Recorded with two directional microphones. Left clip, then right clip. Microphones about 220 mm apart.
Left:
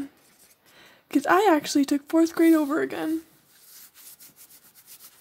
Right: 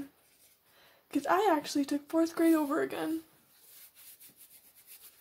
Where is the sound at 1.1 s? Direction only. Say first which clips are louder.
Left 8 dB; 30° left (ahead or behind).